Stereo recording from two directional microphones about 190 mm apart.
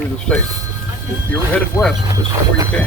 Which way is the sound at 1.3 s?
10° left (ahead or behind).